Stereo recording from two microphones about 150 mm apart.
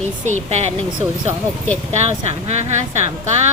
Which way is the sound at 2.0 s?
45° right (ahead or behind).